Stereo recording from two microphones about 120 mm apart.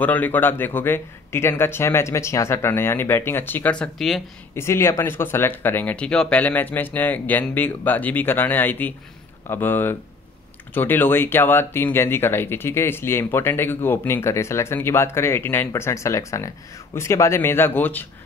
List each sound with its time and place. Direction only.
0.0 s speech: 15° left (ahead or behind)
4.6 s speech: 20° left (ahead or behind)